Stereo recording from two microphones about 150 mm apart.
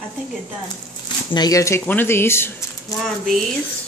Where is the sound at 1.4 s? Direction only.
25° left (ahead or behind).